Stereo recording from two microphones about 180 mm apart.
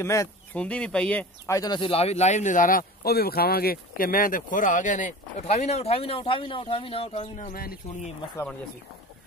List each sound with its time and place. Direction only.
0.0 s speech: 15° left (ahead or behind)
1.5 s speech: 20° left (ahead or behind); by 2.8 s 45° left (ahead or behind)
3.0 s speech: 60° left (ahead or behind)